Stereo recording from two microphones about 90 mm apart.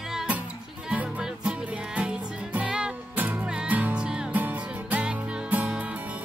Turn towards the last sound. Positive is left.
turn(degrees=-15)  # may be behind; listen again after turning